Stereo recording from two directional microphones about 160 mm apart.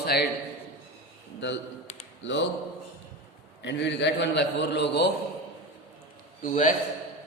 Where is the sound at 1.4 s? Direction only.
90° left.